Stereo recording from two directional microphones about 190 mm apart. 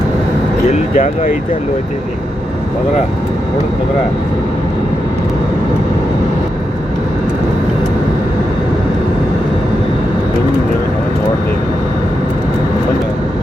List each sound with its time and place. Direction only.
0.7 s speech: 40° left (ahead or behind)